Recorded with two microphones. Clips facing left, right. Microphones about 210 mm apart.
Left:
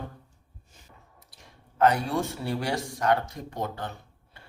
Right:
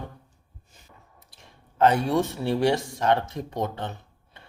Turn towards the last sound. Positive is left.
turn(degrees=-20)  # may be behind; listen again after turning